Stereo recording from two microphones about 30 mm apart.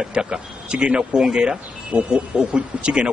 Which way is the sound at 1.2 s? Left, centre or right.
Centre.